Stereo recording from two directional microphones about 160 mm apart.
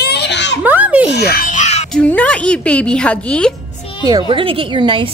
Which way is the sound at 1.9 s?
10° left (ahead or behind).